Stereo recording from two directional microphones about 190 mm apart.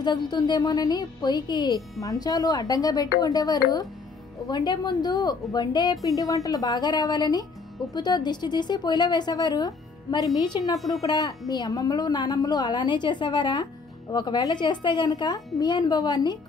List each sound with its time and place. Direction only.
0.0 s speech: 20° left (ahead or behind)